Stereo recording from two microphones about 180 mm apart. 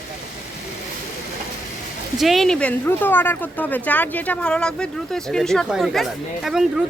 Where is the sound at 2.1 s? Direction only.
Centre (ahead or behind).